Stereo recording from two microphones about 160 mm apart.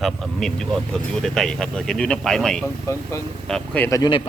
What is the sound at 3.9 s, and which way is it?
Speech, 25° left (ahead or behind).